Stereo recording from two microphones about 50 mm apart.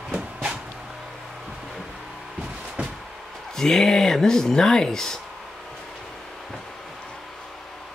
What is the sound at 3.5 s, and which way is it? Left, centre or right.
Speech, centre.